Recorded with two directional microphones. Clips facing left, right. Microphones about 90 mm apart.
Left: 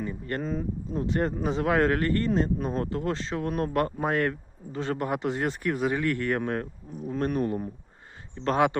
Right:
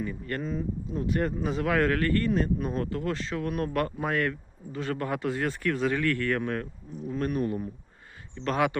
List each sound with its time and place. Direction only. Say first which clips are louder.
0.0 s speech: left 1 dB; 30° left (ahead or behind)
1.0 s speech: left 1 dB; 30° left (ahead or behind)